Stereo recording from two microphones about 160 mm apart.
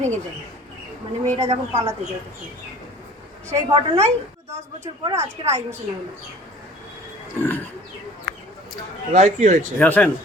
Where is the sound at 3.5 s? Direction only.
25° right (ahead or behind).